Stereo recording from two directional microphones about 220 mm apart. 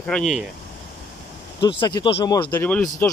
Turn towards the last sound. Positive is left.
turn(degrees=10)  # may be behind; listen again after turning